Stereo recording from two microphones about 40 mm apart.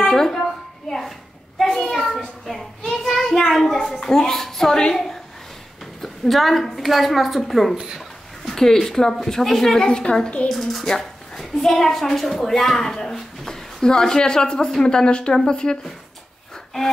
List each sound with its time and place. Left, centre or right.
0.0 s a sound: centre
1.6 s a child's voice: centre
10.5 s a woman's voice: centre; by 15.8 s left